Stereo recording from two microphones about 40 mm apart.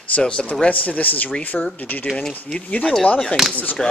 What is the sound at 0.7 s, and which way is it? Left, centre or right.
Speech, left.